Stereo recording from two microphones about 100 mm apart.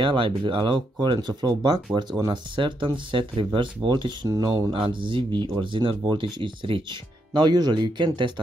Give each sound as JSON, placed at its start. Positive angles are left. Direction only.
{"t": 0.0, "sound": "speech", "side_deg": -55}
{"t": 2.6, "sound": "speech", "side_deg": -55}
{"t": 4.3, "sound": "speech", "side_deg": -35}
{"t": 4.9, "sound": "speech", "side_deg": -55}